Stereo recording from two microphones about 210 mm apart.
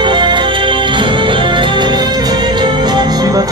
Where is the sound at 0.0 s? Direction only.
20° right (ahead or behind).